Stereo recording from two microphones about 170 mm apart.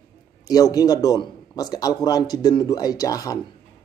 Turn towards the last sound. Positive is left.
turn(degrees=20)  # may be behind; listen again after turning